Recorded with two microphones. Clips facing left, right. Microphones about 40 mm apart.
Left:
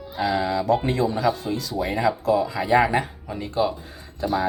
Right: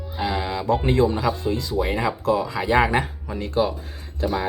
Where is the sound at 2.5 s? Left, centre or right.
Right.